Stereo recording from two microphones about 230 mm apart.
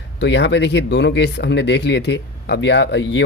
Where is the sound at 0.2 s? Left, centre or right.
Left.